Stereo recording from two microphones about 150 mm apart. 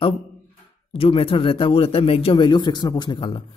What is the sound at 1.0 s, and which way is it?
A man's voice, 40° left (ahead or behind).